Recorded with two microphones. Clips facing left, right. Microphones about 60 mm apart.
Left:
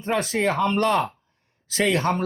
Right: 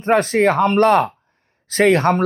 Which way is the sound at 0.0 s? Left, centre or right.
Right.